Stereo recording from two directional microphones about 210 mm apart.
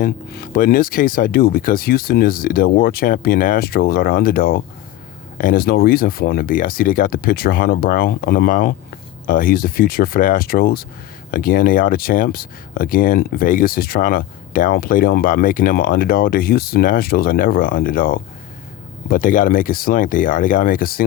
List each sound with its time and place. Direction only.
0.0 s speech: 45° left (ahead or behind)